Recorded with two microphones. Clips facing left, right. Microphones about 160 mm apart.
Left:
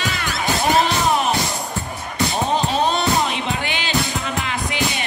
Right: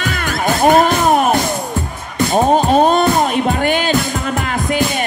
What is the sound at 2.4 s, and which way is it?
Music, 50° right (ahead or behind).